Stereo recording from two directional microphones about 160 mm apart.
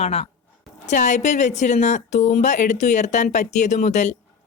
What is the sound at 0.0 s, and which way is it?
A woman's voice, 40° left (ahead or behind).